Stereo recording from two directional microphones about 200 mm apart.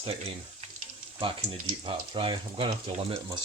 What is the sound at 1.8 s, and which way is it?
Speech, 25° right (ahead or behind).